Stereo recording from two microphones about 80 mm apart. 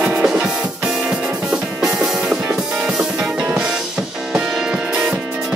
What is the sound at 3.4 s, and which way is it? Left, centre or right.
Music, centre.